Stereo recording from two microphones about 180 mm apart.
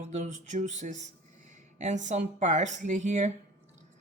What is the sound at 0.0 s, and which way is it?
A woman's voice, 40° right (ahead or behind).